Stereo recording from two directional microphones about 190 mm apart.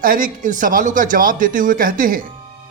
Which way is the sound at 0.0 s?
45° right (ahead or behind).